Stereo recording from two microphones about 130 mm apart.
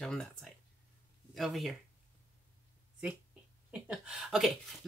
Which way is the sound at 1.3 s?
Centre (ahead or behind).